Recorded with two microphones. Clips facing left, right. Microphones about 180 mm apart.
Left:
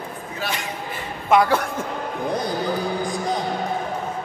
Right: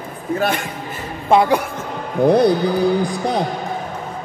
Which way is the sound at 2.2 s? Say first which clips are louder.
Right 12 dB; 70° right (ahead or behind).